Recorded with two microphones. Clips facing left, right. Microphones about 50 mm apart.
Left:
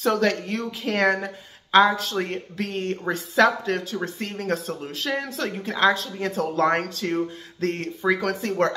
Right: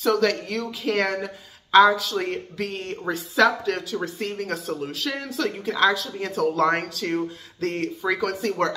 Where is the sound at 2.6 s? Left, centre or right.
Left.